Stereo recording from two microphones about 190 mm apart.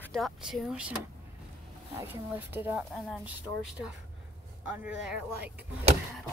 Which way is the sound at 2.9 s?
Centre (ahead or behind).